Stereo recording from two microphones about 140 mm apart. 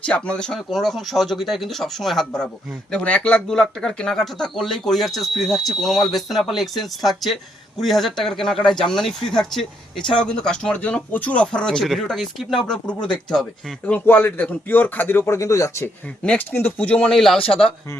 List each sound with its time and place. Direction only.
0.0 s speech: 10° left (ahead or behind)
16.2 s speech: 10° left (ahead or behind)